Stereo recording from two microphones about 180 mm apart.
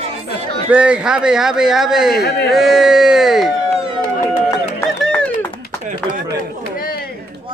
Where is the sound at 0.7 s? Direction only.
5° right (ahead or behind).